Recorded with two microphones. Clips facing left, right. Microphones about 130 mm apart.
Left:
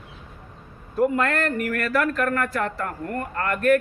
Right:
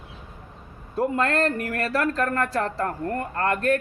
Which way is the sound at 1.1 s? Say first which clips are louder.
Even; 30° right (ahead or behind).